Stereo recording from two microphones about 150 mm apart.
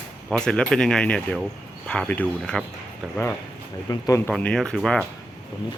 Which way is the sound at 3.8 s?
20° left (ahead or behind).